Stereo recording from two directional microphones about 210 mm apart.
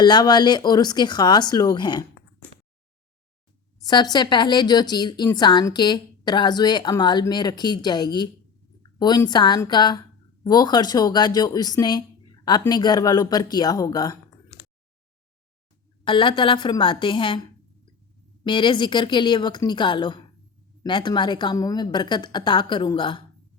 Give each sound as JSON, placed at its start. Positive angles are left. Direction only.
{"t": 0.0, "sound": "a woman's voice", "side_deg": 20}
{"t": 3.8, "sound": "a woman's voice", "side_deg": 20}
{"t": 16.0, "sound": "a woman's voice", "side_deg": 25}
{"t": 18.4, "sound": "a woman's voice", "side_deg": 20}